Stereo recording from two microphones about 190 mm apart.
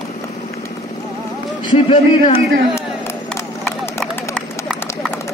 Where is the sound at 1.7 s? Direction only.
30° left (ahead or behind).